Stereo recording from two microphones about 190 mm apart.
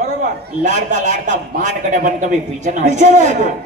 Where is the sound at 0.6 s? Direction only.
40° right (ahead or behind).